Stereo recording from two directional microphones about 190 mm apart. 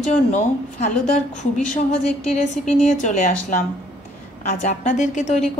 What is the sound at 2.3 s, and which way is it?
A woman's voice, 40° left (ahead or behind).